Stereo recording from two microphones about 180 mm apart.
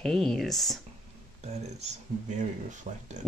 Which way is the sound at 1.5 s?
40° right (ahead or behind).